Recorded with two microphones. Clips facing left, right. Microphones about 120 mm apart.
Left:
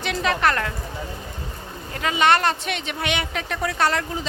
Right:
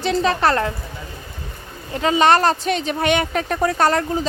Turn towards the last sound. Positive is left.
turn(degrees=-40)  # may be behind; listen again after turning